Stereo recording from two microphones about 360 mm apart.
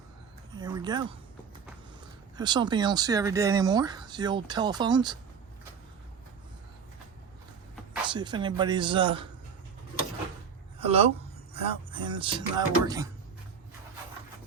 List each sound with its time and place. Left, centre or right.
0.5 s speech: centre
2.3 s speech: centre
8.0 s speech: centre
10.8 s a sound: centre
11.5 s speech: centre